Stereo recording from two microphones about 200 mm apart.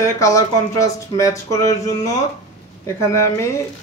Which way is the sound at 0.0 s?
15° left (ahead or behind).